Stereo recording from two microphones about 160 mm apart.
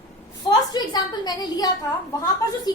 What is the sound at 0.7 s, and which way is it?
A woman's voice, 25° left (ahead or behind).